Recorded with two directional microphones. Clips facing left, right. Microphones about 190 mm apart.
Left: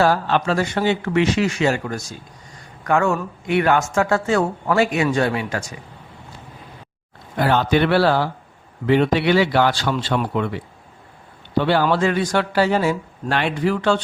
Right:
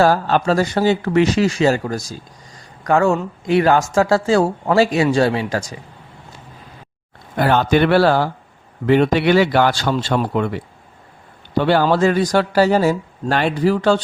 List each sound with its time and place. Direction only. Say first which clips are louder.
0.0 s speech: right 3 dB; 40° right (ahead or behind)
7.3 s a man's voice: right 2 dB; 50° right (ahead or behind)